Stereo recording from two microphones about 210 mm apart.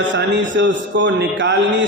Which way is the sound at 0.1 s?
60° right (ahead or behind).